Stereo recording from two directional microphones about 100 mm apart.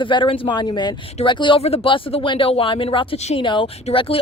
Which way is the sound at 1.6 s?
90° left.